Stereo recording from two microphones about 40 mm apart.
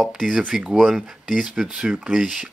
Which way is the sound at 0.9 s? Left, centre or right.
Centre.